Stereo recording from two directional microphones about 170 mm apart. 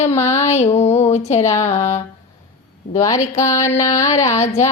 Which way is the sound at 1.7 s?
40° left (ahead or behind).